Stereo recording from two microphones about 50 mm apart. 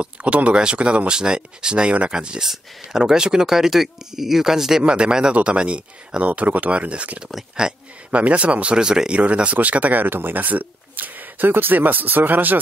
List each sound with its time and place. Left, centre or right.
0.0 s speech: right
7.6 s speech: centre
8.1 s speech: right
10.0 s speech: right